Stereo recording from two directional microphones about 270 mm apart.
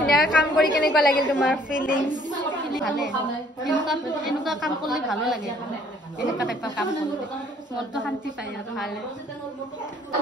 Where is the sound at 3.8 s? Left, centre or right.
Centre.